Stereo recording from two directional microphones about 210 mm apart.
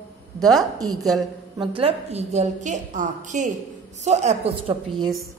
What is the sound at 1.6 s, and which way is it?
A woman's voice, 25° right (ahead or behind).